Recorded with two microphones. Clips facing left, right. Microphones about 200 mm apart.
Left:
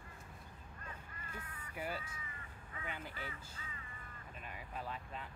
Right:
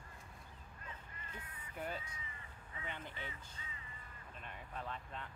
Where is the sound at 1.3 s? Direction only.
25° right (ahead or behind).